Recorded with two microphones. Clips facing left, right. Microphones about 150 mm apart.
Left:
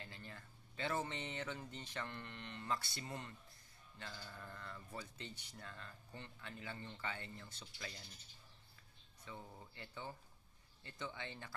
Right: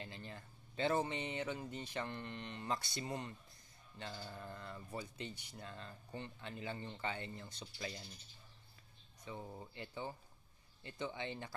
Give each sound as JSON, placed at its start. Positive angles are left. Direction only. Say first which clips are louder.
{"t": 0.0, "sound": "a sound", "louder": "right 4 dB", "side_deg": -20}
{"t": 1.0, "sound": "speech", "louder": "right 4 dB", "side_deg": -15}
{"t": 7.6, "sound": "speech", "louder": "right 7 dB", "side_deg": -30}
{"t": 9.2, "sound": "speech", "louder": "right 5 dB", "side_deg": -20}